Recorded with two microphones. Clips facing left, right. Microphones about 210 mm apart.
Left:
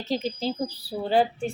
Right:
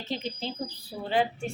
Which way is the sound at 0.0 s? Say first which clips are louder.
Left 6 dB; 40° left (ahead or behind).